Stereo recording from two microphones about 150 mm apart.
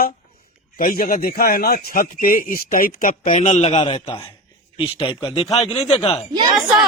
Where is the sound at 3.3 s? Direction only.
50° left (ahead or behind).